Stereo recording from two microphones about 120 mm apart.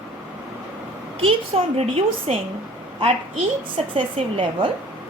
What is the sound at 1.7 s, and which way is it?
A woman's voice, 55° right (ahead or behind).